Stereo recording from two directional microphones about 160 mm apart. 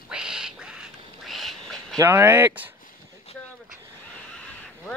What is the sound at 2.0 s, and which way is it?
Speech, 15° right (ahead or behind).